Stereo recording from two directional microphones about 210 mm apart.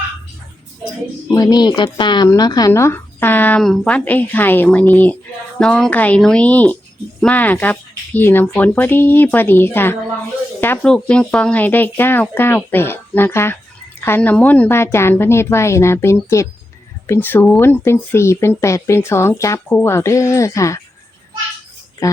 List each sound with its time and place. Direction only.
1.3 s speech: 15° left (ahead or behind)
22.0 s speech: 15° left (ahead or behind)